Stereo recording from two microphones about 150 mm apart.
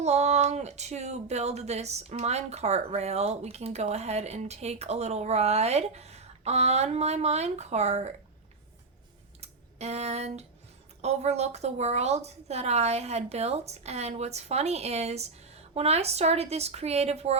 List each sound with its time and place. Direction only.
0.0 s speech: 45° right (ahead or behind)
9.4 s a sound: 45° right (ahead or behind)
11.0 s speech: 45° right (ahead or behind)